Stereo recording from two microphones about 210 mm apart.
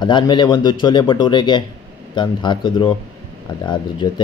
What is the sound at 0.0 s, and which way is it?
Speech, 20° left (ahead or behind).